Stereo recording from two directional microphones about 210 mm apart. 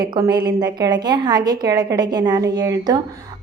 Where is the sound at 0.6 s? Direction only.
20° right (ahead or behind).